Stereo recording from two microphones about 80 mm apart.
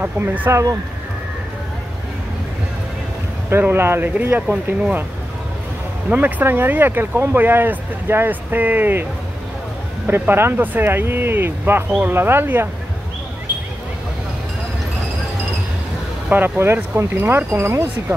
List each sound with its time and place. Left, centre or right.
0.0 s speech: right
0.5 s speech: right
3.4 s speech: right
6.0 s speech: centre
10.0 s speech: right
16.3 s speech: right
17.6 s speech: right